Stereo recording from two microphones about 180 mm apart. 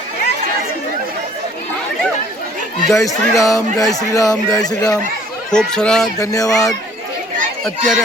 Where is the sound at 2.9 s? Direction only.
20° left (ahead or behind).